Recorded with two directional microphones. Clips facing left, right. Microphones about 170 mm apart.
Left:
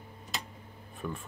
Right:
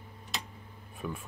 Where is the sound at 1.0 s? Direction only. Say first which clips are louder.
Even; 5° right (ahead or behind).